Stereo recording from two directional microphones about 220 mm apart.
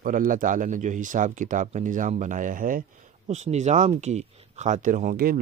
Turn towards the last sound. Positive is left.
turn(degrees=-40)  # may be behind; listen again after turning